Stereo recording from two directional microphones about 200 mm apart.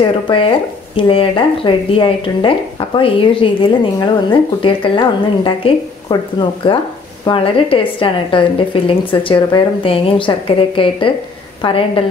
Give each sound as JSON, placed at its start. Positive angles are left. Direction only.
{"t": 0.3, "sound": "a woman's voice", "side_deg": 25}